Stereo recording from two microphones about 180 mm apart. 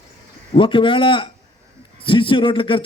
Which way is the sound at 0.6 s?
30° left (ahead or behind).